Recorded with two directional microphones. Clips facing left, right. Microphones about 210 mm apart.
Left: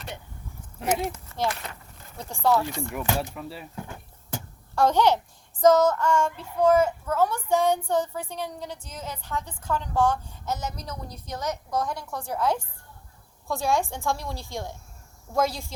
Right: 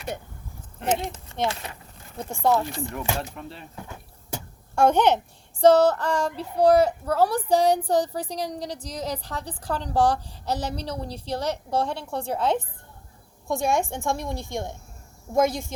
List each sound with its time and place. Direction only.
0.8 s speech: 5° left (ahead or behind)
1.1 s a woman's voice: 25° right (ahead or behind)
2.7 s speech: centre (ahead or behind)
4.9 s speech: 15° right (ahead or behind)
5.5 s a woman's voice: 30° right (ahead or behind)